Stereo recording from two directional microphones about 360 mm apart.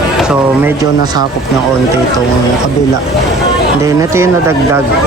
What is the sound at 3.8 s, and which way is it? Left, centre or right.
Speech, centre.